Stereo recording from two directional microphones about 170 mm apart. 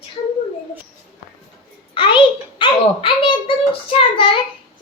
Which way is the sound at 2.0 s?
30° left (ahead or behind).